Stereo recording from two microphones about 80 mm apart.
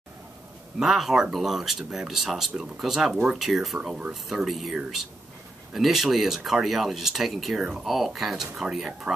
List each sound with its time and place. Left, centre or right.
0.7 s speech: centre